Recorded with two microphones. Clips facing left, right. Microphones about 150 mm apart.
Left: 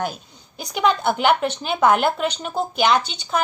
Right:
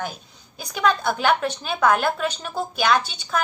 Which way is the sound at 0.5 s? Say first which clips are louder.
Left 2 dB; 20° left (ahead or behind).